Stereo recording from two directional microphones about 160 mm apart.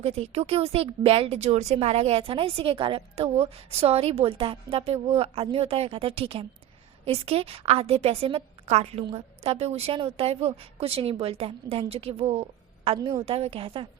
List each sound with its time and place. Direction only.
0.0 s a woman's voice: 40° right (ahead or behind)
13.0 s a woman's voice: 25° right (ahead or behind)
13.2 s a woman's voice: 40° right (ahead or behind)